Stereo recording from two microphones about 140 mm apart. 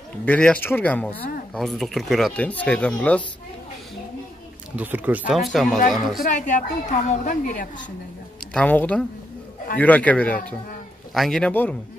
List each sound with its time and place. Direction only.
0.2 s speech: 10° left (ahead or behind)
4.7 s speech: 10° right (ahead or behind)
5.4 s speech: centre (ahead or behind)
6.2 s a woman's voice: 60° left (ahead or behind); by 7.7 s 85° left
8.5 s speech: 10° left (ahead or behind)